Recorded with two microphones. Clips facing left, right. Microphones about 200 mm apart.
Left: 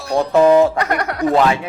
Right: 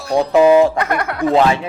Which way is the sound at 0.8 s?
35° left (ahead or behind).